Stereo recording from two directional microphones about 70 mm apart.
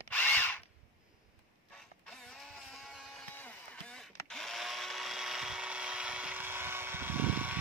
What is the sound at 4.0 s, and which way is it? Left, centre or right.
Blender, centre.